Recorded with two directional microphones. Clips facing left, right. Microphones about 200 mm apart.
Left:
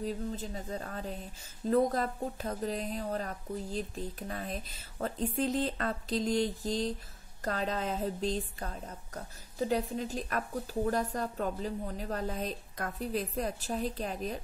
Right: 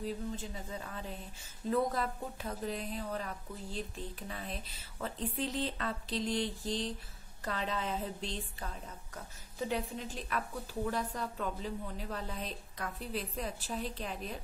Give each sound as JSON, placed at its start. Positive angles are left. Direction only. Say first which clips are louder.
{"t": 0.0, "sound": "a woman's voice", "louder": "left 3 dB", "side_deg": 40}